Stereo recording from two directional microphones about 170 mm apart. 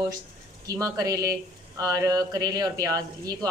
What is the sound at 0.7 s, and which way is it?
Speech, 20° right (ahead or behind).